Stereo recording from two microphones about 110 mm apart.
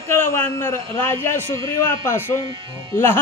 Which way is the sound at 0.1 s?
20° left (ahead or behind).